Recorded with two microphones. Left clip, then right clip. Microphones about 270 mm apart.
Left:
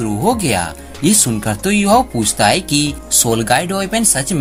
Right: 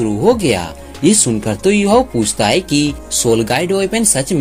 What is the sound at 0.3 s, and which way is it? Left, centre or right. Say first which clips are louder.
Speech: right 1 dB; left.